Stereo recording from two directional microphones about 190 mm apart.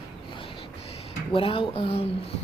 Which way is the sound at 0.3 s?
25° left (ahead or behind).